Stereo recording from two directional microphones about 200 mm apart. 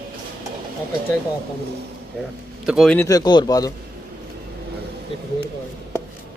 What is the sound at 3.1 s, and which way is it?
Speech, 20° left (ahead or behind).